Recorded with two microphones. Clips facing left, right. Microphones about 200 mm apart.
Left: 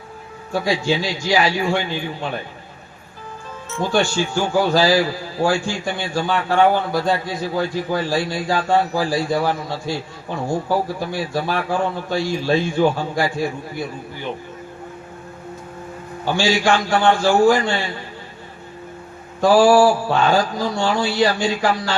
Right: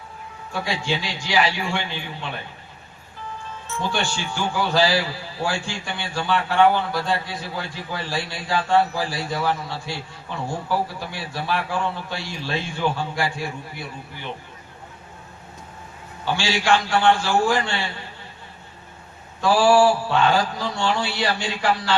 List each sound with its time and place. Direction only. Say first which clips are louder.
0.5 s a man's voice: left 6 dB; 40° left (ahead or behind)
3.8 s a man's voice: left 7 dB; 45° left (ahead or behind)
16.2 s a man's voice: left 5 dB; 45° left (ahead or behind)
19.4 s a man's voice: left 4 dB; 45° left (ahead or behind)